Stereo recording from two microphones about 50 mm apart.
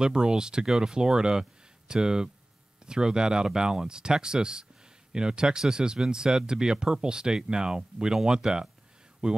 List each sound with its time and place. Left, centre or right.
0.0 s speech: centre